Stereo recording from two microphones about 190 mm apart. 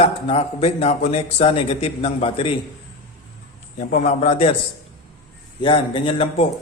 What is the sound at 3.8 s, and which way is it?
Speech, 40° left (ahead or behind).